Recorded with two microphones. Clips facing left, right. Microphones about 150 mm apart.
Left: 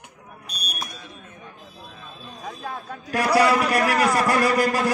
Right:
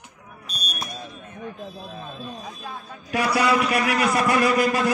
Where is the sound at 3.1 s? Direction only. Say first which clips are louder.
Left 2 dB; 40° left (ahead or behind).